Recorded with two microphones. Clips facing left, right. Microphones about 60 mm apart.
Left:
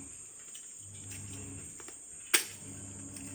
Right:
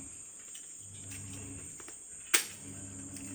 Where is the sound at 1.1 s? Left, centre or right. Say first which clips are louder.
Even; centre.